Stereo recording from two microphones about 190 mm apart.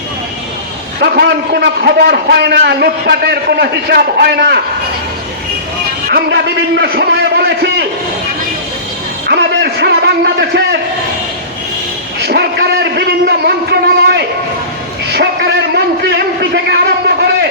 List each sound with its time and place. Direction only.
1.0 s a man's voice: 55° right (ahead or behind)
6.1 s a man's voice: 55° right (ahead or behind)
9.2 s a sound: 55° right (ahead or behind)
12.2 s a man's voice: 60° right (ahead or behind)
15.7 s a man's voice: 60° right (ahead or behind)